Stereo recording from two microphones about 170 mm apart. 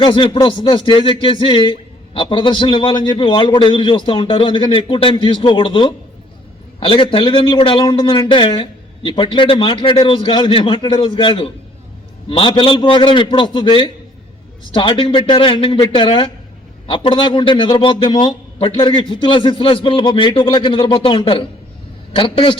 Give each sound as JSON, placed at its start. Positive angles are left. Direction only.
{"t": 0.0, "sound": "a man's voice", "side_deg": 30}